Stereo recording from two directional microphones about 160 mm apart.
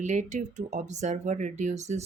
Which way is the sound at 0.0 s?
50° right (ahead or behind).